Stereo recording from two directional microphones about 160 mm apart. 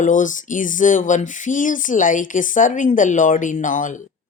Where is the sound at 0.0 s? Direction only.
55° left (ahead or behind).